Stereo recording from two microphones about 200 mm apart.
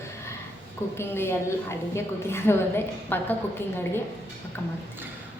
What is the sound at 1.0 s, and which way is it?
A woman's voice, 10° left (ahead or behind).